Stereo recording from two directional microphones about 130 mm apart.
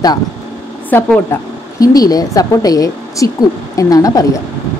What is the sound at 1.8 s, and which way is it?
Speech, 30° left (ahead or behind).